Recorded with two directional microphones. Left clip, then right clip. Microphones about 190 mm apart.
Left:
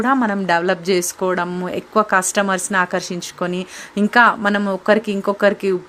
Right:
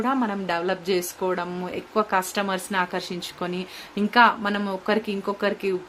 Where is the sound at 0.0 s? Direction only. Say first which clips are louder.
Left 7 dB; 45° left (ahead or behind).